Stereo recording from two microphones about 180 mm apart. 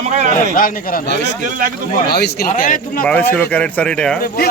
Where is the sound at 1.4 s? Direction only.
50° right (ahead or behind).